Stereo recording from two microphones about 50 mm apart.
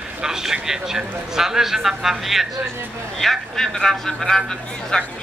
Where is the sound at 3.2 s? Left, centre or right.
Centre.